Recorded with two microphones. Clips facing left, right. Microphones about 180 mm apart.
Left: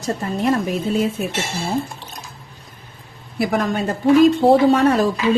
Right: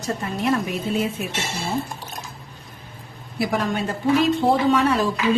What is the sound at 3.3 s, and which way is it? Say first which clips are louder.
A woman's voice: left 3 dB; 45° left (ahead or behind).